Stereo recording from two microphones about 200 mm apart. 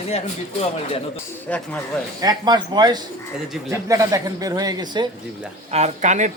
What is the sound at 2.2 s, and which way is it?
Speech, 20° right (ahead or behind).